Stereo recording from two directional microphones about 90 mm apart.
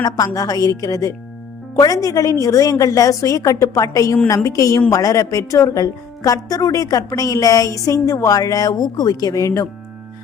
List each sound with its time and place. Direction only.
0.3 s a woman's voice: 40° left (ahead or behind)